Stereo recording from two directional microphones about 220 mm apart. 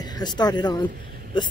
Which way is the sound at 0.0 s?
20° left (ahead or behind).